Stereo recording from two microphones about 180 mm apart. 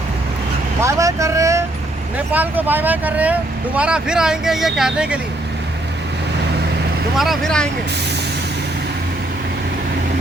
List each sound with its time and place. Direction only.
0.8 s speech: 15° right (ahead or behind)
7.2 s speech: centre (ahead or behind)